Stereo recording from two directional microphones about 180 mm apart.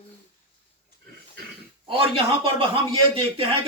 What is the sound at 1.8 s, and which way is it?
Speech, 30° right (ahead or behind).